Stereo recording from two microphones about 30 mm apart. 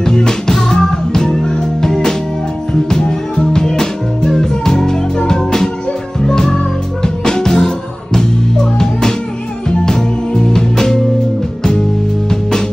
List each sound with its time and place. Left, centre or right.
0.0 s music: left
12.3 s music: left